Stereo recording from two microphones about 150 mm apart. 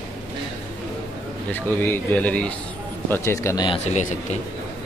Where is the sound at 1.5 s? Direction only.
15° left (ahead or behind).